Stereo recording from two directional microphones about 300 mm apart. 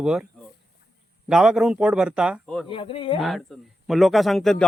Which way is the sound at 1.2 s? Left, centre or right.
Centre.